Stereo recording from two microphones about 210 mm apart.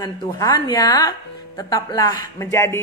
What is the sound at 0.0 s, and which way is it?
A woman's voice, 20° left (ahead or behind).